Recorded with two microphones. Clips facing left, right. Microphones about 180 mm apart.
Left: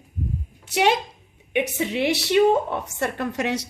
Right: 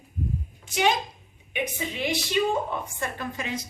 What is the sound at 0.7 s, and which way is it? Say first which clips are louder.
A woman's voice: left 4 dB; 70° left (ahead or behind).